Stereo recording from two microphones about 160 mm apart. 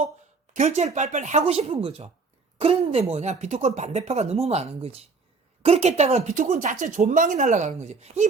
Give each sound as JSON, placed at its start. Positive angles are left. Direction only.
{"t": 0.5, "sound": "speech", "side_deg": -50}